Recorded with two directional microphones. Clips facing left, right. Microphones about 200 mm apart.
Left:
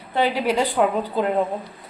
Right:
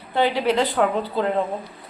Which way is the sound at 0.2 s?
10° left (ahead or behind).